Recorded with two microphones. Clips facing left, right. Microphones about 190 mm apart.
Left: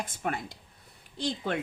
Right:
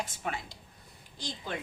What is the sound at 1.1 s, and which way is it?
Speech, 65° left (ahead or behind).